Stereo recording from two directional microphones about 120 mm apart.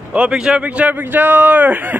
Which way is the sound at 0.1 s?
10° right (ahead or behind).